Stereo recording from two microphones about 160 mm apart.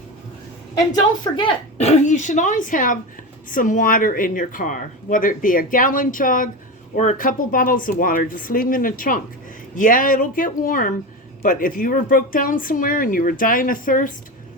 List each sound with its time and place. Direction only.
0.8 s a woman's voice: 25° left (ahead or behind)
1.8 s speech: 45° left (ahead or behind)